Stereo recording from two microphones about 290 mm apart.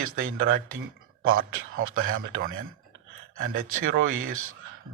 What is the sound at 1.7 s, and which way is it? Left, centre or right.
Speech, right.